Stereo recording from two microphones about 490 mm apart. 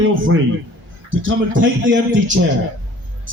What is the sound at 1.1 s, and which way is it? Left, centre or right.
A man's voice, right.